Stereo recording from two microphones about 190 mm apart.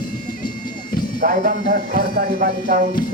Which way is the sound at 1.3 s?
45° right (ahead or behind).